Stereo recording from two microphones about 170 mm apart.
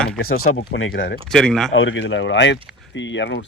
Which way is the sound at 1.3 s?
5° left (ahead or behind).